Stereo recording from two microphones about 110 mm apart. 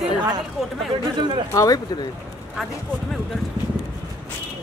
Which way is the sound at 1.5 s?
30° left (ahead or behind).